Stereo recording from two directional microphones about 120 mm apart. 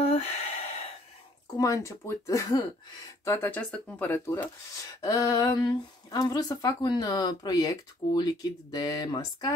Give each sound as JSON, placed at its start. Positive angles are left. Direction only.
{"t": 0.0, "sound": "gasp", "side_deg": 55}
{"t": 1.6, "sound": "speech", "side_deg": 25}
{"t": 3.3, "sound": "speech", "side_deg": 15}